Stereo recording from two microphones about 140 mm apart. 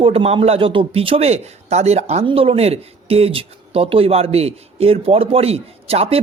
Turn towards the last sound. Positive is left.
turn(degrees=-45)  # may be behind; listen again after turning